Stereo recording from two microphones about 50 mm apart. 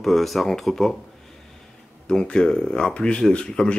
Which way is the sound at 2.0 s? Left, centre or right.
Centre.